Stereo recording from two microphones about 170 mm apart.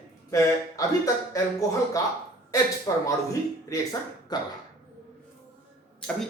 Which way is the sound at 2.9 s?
20° left (ahead or behind).